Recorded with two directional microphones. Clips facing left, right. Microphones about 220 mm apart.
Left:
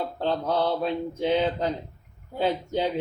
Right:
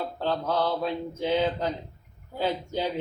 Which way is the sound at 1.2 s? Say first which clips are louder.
Left 1 dB; 20° left (ahead or behind).